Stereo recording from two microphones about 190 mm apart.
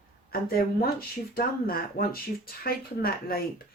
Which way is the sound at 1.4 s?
50° left (ahead or behind).